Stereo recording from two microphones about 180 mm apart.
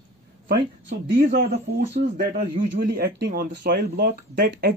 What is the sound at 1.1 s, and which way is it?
A man's voice, 50° right (ahead or behind).